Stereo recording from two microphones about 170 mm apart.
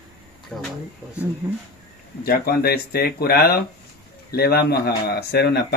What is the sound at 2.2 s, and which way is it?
Speech, 60° left (ahead or behind).